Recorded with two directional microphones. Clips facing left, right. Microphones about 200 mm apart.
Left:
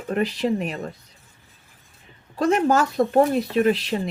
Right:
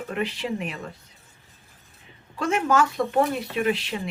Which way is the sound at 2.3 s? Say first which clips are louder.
Left 4 dB; 35° left (ahead or behind).